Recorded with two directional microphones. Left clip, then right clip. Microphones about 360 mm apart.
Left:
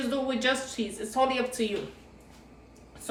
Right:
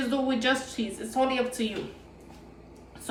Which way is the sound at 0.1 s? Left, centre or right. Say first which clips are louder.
Right 1 dB; centre.